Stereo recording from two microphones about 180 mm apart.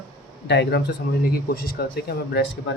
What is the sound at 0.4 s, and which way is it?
Speech, 70° left (ahead or behind).